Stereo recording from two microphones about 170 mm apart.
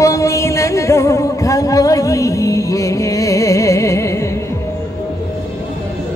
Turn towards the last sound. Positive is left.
turn(degrees=15)  # may be behind; listen again after turning